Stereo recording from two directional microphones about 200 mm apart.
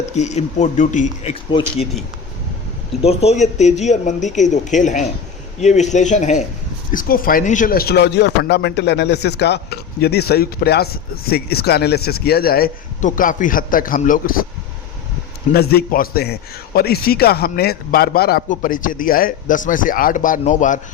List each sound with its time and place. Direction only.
0.1 s speech: 35° left (ahead or behind)
3.0 s a man's voice: 30° left (ahead or behind)
15.5 s a man's voice: 50° left (ahead or behind)